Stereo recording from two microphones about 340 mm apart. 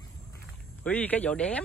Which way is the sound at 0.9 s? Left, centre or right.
Centre.